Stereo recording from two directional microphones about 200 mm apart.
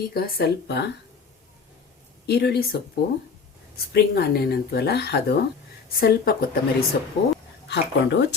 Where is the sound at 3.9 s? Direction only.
55° left (ahead or behind).